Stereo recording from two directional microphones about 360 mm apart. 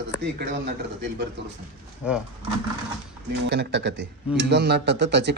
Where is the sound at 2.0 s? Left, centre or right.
Centre.